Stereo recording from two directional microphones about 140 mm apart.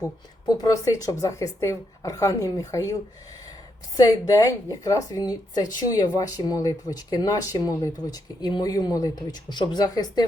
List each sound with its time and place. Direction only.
0.0 s speech: 30° left (ahead or behind)